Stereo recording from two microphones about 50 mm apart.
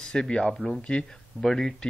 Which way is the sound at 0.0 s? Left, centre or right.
Centre.